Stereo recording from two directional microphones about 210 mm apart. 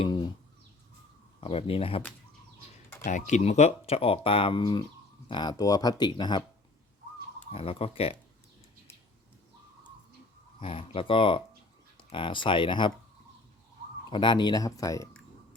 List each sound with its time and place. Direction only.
1.4 s speech: 25° left (ahead or behind)
3.1 s speech: 35° left (ahead or behind)
7.5 s speech: 25° left (ahead or behind)
10.6 s speech: 25° left (ahead or behind)
14.1 s speech: 20° left (ahead or behind)